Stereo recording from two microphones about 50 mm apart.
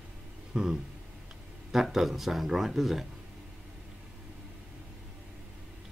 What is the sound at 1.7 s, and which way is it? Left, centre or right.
Speech, centre.